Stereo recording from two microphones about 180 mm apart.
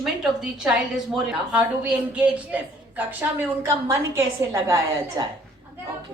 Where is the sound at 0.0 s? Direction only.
Centre (ahead or behind).